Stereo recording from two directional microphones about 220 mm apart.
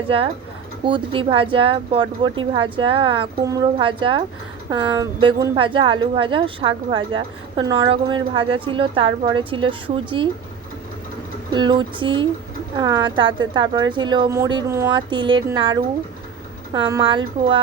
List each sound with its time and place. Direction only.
0.9 s a woman's voice: 20° right (ahead or behind)
11.5 s a woman's voice: 20° right (ahead or behind)